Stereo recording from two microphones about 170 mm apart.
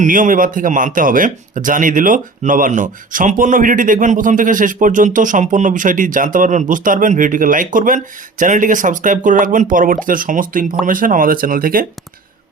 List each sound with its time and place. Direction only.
0.0 s speech: 50° right (ahead or behind)